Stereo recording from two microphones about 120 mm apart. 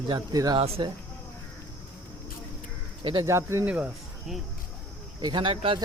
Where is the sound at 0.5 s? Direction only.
45° right (ahead or behind).